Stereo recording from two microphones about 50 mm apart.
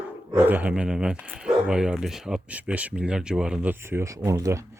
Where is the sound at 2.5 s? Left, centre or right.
Right.